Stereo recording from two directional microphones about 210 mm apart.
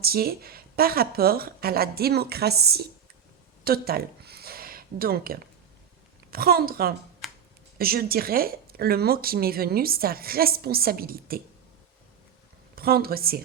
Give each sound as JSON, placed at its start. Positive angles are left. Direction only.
{"t": 0.0, "sound": "speech", "side_deg": -45}
{"t": 3.6, "sound": "a sound", "side_deg": -45}
{"t": 6.3, "sound": "speech", "side_deg": -45}
{"t": 7.2, "sound": "a sound", "side_deg": 0}
{"t": 7.8, "sound": "speech", "side_deg": -45}
{"t": 12.7, "sound": "speech", "side_deg": -45}